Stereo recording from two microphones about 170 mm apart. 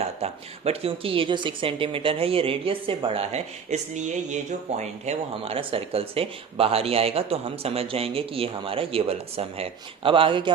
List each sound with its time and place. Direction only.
0.2 s speech: 35° right (ahead or behind)